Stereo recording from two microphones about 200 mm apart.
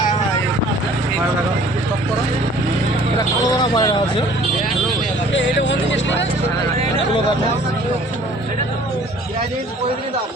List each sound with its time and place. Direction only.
3.5 s speech: 20° left (ahead or behind)
5.3 s speech: 60° left (ahead or behind)